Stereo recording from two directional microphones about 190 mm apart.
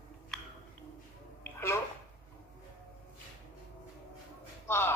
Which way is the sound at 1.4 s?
10° left (ahead or behind).